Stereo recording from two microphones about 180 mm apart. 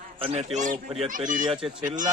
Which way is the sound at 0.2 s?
35° right (ahead or behind).